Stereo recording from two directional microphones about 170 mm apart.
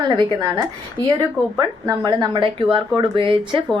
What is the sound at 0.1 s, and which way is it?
Speech, 25° right (ahead or behind).